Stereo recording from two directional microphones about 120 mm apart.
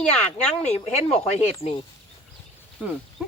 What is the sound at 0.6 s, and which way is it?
Speech, 65° left (ahead or behind).